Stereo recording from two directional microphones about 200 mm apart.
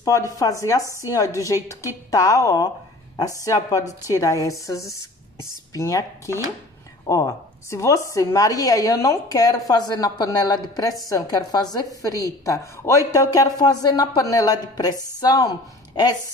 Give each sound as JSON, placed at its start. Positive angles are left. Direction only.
{"t": 0.0, "sound": "a woman's voice", "side_deg": 15}